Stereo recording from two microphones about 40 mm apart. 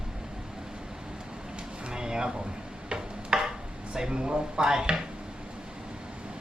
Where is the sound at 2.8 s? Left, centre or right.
Right.